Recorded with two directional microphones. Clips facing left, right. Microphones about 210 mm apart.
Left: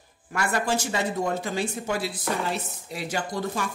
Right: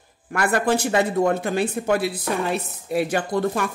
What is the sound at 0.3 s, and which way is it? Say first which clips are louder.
Speech: right 5 dB; 55° right (ahead or behind).